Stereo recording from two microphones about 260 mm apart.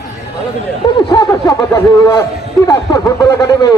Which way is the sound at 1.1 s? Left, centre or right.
Centre.